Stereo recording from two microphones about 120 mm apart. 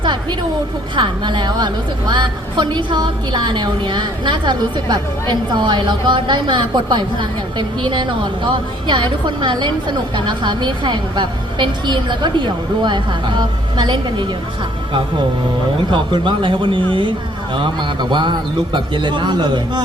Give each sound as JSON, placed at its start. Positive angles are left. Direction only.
{"t": 0.0, "sound": "a sound", "side_deg": -40}
{"t": 0.9, "sound": "a woman's voice", "side_deg": -40}
{"t": 15.9, "sound": "a woman's voice", "side_deg": -45}